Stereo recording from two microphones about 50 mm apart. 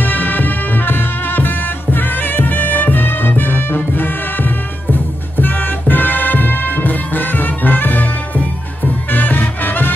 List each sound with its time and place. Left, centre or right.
0.0 s music: left